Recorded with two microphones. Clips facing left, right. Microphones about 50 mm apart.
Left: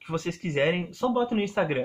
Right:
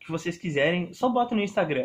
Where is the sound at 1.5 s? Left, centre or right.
Centre.